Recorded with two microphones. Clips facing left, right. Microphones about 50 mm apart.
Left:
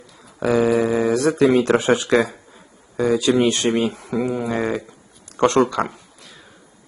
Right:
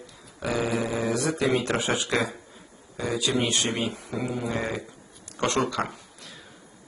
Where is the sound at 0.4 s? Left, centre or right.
Left.